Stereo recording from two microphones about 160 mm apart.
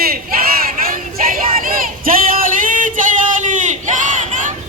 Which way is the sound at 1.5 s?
60° right (ahead or behind).